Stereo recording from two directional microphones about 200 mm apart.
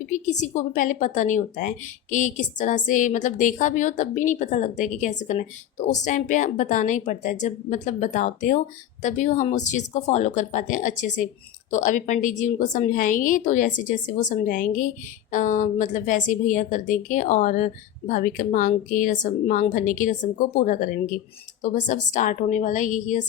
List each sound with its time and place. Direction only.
0.0 s a woman's voice: 35° left (ahead or behind)